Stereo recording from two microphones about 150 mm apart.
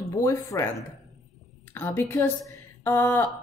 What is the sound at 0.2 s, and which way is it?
Speech, 20° left (ahead or behind).